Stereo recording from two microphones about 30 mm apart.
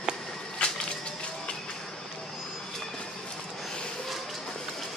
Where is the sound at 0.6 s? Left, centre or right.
Left.